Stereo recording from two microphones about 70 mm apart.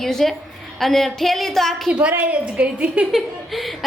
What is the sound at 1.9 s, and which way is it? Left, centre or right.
A woman's voice, centre.